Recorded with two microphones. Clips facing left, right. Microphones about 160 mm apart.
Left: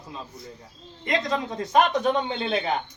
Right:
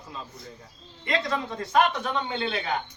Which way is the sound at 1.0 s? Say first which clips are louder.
Left 2 dB; 20° left (ahead or behind).